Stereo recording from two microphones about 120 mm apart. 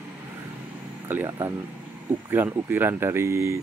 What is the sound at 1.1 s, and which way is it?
Speech, 20° right (ahead or behind).